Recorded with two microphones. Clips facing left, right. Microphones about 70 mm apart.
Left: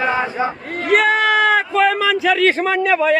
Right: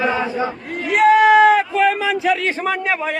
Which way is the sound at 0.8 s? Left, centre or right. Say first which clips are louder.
Even; left.